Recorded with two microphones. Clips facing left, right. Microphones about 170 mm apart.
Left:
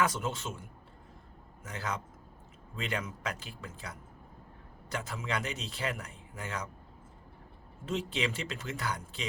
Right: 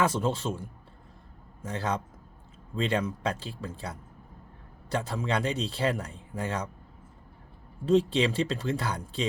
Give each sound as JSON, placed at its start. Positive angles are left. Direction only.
{"t": 0.0, "sound": "a man's voice", "side_deg": -30}
{"t": 7.9, "sound": "a man's voice", "side_deg": -35}